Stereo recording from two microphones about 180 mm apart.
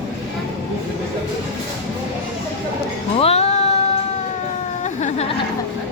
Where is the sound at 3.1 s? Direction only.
35° left (ahead or behind).